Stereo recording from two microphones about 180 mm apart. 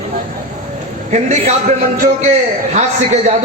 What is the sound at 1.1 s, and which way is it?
Speech, 40° right (ahead or behind).